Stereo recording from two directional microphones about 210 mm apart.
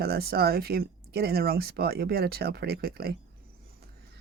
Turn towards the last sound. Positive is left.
turn(degrees=-45)  # may be behind; listen again after turning